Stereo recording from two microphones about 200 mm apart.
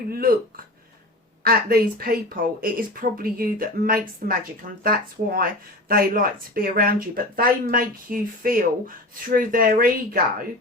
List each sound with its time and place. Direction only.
0.1 s speech: 45° right (ahead or behind)
1.5 s speech: 45° right (ahead or behind)